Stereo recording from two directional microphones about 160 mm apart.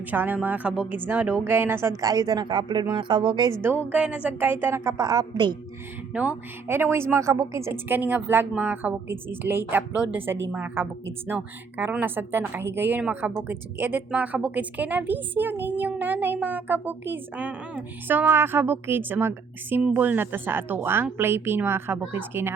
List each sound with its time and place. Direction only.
0.1 s speech: 10° right (ahead or behind); by 3.5 s 30° right (ahead or behind)
3.6 s speech: 15° right (ahead or behind)
6.1 s speech: 10° right (ahead or behind)